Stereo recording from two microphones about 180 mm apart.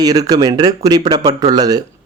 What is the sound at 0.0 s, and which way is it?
Speech, 20° right (ahead or behind).